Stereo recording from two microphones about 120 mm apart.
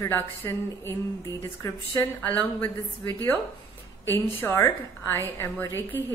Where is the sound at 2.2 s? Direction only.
15° left (ahead or behind).